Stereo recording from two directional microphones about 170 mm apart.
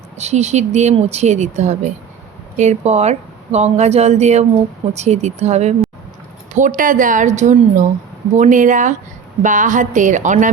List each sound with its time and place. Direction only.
0.2 s a woman's voice: 40° right (ahead or behind)